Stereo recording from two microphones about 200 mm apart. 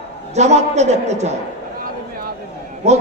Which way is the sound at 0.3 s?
35° right (ahead or behind).